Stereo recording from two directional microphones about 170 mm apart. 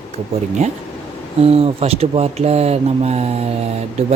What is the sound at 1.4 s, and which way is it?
Speech, 35° right (ahead or behind).